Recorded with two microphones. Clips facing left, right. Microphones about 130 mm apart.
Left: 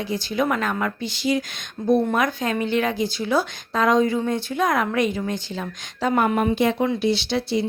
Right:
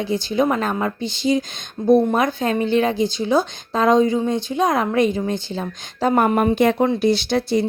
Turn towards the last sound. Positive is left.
turn(degrees=-45)  # may be behind; listen again after turning